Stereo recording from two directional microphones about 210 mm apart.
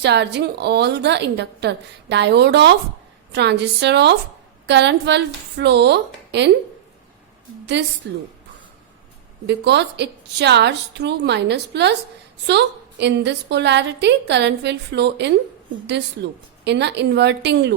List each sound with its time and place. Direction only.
0.0 s a woman's voice: 55° right (ahead or behind)
7.8 s a woman's voice: 55° right (ahead or behind)
9.5 s a woman's voice: 55° right (ahead or behind)